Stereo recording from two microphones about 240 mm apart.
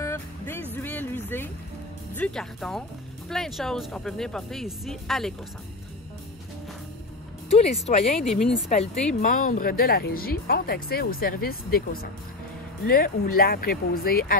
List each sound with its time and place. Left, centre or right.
0.0 s music: centre
0.8 s a sound: centre
2.1 s speech: centre
7.4 s speech: left
8.2 s speech: centre
9.2 s speech: left